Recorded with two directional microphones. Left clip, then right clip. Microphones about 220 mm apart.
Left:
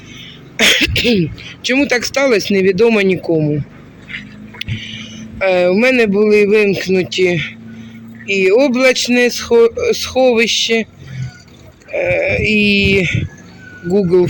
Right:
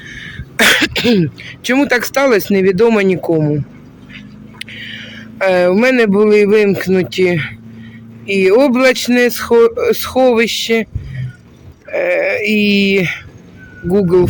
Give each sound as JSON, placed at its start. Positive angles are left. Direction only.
{"t": 0.6, "sound": "cough", "side_deg": -20}
{"t": 1.7, "sound": "speech", "side_deg": -10}
{"t": 4.9, "sound": "speech", "side_deg": -10}
{"t": 11.9, "sound": "speech", "side_deg": -10}